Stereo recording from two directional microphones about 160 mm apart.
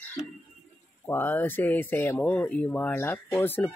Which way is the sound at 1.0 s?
10° left (ahead or behind).